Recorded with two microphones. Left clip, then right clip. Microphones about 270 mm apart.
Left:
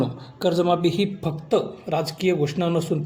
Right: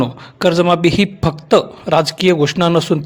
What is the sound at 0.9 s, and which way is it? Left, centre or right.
A man's voice, right.